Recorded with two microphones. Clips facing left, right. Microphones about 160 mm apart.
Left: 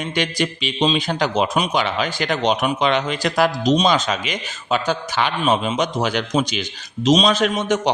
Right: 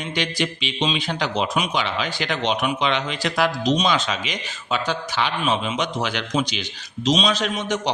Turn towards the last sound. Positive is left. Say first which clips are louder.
# left 5 dB
turn(degrees=50)  # may be behind; listen again after turning